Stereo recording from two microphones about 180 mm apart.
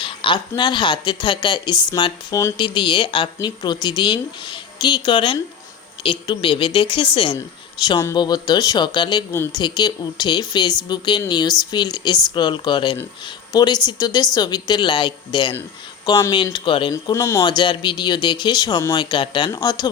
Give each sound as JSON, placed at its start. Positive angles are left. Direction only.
{"t": 0.0, "sound": "speech", "side_deg": 25}
{"t": 16.9, "sound": "speech", "side_deg": 15}